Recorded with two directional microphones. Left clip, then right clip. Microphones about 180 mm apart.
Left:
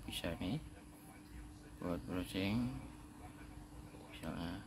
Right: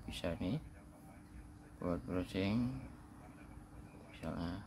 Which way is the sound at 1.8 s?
25° right (ahead or behind).